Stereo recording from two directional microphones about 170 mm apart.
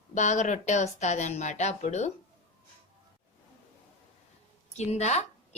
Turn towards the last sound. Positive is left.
turn(degrees=40)  # may be behind; listen again after turning